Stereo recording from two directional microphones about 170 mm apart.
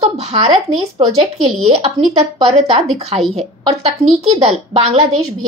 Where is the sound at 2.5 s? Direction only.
35° right (ahead or behind).